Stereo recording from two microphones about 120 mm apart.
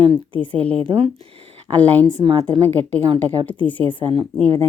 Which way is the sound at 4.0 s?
45° right (ahead or behind).